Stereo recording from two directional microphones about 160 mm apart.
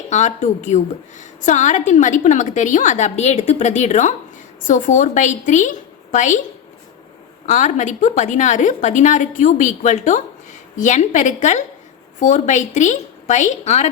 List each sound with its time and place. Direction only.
0.1 s a woman's voice: 45° left (ahead or behind)
7.4 s a woman's voice: 50° left (ahead or behind)